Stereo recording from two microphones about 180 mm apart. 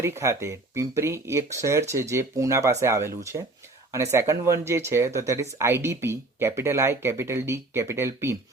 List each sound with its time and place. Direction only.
0.0 s speech: 15° right (ahead or behind)